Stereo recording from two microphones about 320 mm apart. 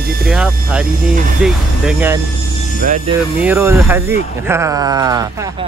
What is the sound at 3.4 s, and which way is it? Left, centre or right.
Speech, centre.